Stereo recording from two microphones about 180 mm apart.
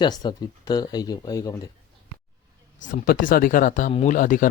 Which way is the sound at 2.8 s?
45° left (ahead or behind).